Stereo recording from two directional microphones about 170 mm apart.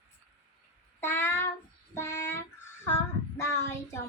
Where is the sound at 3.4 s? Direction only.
15° left (ahead or behind).